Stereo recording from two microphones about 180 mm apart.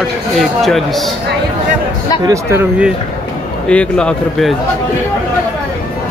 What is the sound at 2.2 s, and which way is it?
Speech, 15° right (ahead or behind).